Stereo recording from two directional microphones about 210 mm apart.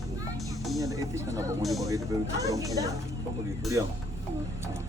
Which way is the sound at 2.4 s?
15° right (ahead or behind).